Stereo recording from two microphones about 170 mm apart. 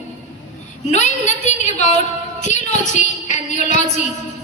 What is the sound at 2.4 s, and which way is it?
A woman's voice, 45° left (ahead or behind).